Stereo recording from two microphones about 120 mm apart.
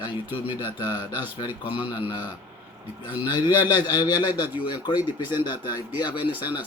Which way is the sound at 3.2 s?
40° left (ahead or behind).